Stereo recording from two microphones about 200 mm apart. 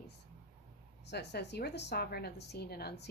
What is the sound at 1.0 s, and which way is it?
Speech, 55° left (ahead or behind).